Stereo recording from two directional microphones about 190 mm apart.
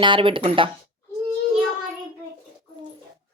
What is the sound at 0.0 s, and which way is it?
Speech, 25° right (ahead or behind).